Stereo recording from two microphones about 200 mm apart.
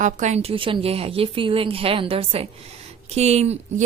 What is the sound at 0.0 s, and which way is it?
A woman's voice, 35° right (ahead or behind).